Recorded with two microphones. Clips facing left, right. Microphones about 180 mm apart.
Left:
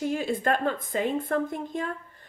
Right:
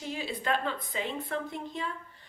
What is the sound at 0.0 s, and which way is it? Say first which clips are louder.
A woman's voice: left 8 dB; 50° left (ahead or behind).